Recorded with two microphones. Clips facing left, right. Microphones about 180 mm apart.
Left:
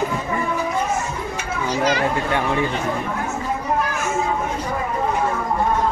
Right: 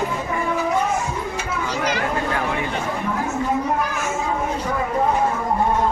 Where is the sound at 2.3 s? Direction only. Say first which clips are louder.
Left 3 dB; 25° left (ahead or behind).